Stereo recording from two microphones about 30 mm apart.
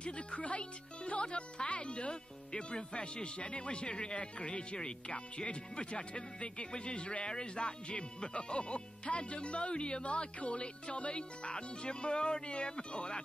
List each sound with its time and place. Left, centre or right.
0.0 s speech: left